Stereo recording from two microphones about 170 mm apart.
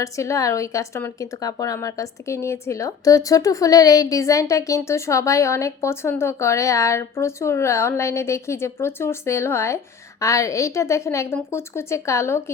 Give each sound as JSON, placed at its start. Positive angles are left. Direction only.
{"t": 0.0, "sound": "a woman's voice", "side_deg": 20}